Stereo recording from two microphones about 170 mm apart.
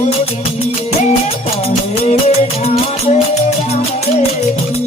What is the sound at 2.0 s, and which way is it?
Music, 40° left (ahead or behind).